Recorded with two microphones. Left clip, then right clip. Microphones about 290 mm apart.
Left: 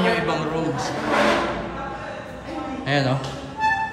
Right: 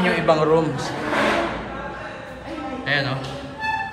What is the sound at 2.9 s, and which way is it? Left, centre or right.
Speech, left.